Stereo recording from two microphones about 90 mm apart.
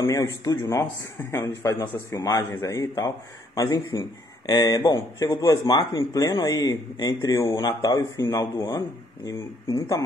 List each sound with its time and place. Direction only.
0.1 s speech: 45° left (ahead or behind)
3.6 s speech: 55° left (ahead or behind)
7.4 s speech: 60° left (ahead or behind)
7.8 s speech: 40° left (ahead or behind)